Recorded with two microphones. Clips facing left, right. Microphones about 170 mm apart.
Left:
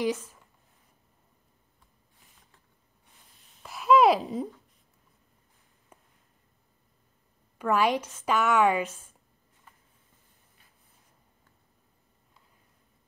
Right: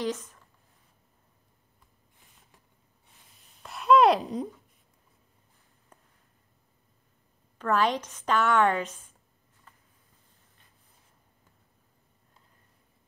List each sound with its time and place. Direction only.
0.0 s speech: 10° left (ahead or behind)
3.6 s babbling: centre (ahead or behind)
5.9 s a sound: 10° left (ahead or behind)
7.5 s a woman's voice: 10° left (ahead or behind)